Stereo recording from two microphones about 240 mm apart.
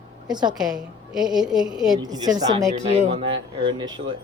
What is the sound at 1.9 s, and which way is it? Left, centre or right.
A woman's voice, centre.